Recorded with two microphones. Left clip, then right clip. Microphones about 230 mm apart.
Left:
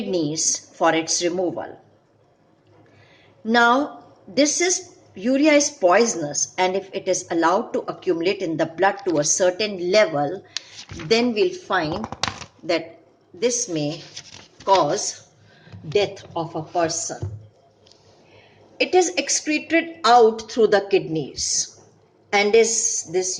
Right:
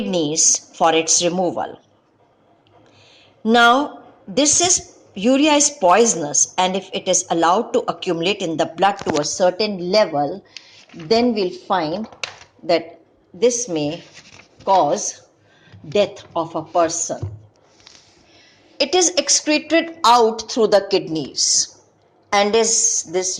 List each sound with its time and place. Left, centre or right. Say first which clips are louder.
0.1 s a woman's voice: right 5 dB; centre
4.4 s a woman's voice: right 3 dB; centre
13.4 s a woman's voice: right 5 dB; centre
18.9 s a woman's voice: right 2 dB; centre